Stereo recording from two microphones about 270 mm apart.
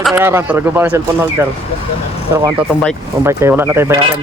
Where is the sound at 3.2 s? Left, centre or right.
Centre.